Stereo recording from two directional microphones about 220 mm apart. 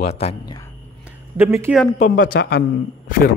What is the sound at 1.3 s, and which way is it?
Speech, 10° right (ahead or behind).